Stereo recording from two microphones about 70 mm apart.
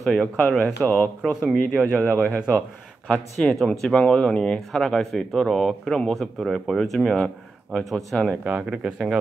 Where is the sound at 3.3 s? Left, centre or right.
Centre.